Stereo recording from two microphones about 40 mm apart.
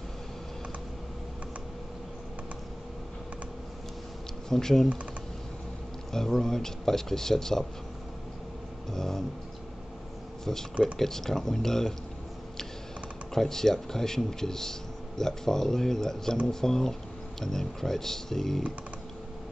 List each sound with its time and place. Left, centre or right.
4.5 s speech: centre
6.1 s speech: centre
8.9 s speech: centre
11.0 s speech: centre
13.3 s speech: centre